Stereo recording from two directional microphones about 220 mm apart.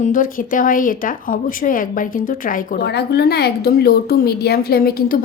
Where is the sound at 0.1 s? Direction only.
40° left (ahead or behind).